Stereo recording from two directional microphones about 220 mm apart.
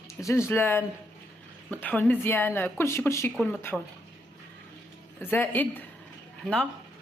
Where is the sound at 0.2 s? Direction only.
15° left (ahead or behind).